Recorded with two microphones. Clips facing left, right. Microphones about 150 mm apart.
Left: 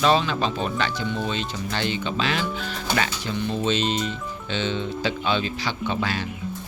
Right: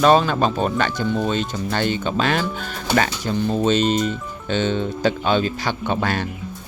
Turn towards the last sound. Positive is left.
turn(degrees=-55)  # may be behind; listen again after turning